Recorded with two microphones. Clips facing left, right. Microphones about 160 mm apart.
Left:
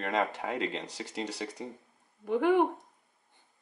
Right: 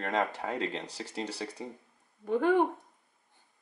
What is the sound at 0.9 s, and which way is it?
Speech, 10° right (ahead or behind).